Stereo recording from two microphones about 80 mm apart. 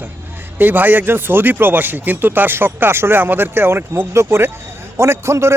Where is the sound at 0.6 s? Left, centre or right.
Right.